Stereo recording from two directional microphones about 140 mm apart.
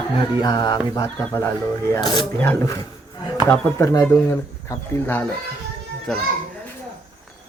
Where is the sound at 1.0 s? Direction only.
20° left (ahead or behind).